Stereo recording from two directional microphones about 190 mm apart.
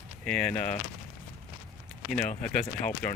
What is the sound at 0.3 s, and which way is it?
Speech, 5° left (ahead or behind).